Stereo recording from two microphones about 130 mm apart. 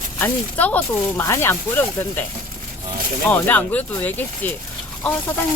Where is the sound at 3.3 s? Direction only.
15° left (ahead or behind).